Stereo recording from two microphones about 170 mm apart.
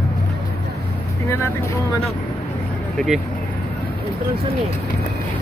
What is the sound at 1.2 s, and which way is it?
Speech, 15° left (ahead or behind).